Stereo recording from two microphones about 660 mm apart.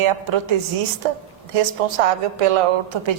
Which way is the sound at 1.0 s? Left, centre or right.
Right.